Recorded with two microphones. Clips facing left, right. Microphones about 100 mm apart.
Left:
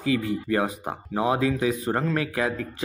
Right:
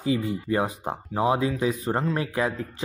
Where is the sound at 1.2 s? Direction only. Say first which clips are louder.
Even; 25° right (ahead or behind).